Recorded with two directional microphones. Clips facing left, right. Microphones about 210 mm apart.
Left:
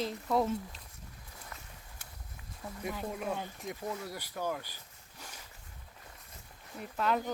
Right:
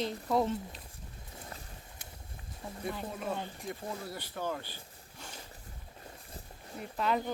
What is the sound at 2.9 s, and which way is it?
Speech, 5° left (ahead or behind).